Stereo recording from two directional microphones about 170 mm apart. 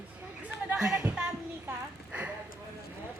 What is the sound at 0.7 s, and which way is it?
Music, 5° right (ahead or behind).